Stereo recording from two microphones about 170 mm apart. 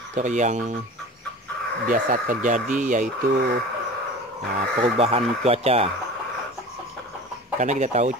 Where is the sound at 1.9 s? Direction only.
55° right (ahead or behind).